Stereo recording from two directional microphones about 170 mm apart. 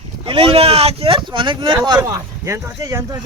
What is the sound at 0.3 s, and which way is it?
Speech, 30° right (ahead or behind).